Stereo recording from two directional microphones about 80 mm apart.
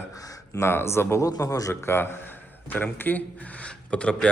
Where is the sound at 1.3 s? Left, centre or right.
Left.